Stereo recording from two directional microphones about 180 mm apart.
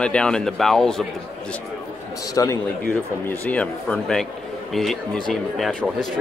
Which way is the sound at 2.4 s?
20° left (ahead or behind).